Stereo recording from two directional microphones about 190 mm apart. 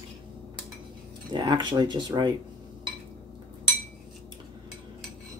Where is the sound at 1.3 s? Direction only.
25° right (ahead or behind).